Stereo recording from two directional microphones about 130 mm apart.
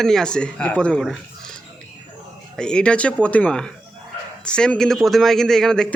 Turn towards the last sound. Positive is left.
turn(degrees=5)  # may be behind; listen again after turning